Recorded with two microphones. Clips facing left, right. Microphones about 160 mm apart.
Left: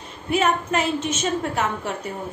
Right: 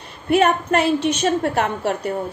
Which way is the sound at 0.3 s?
60° right (ahead or behind).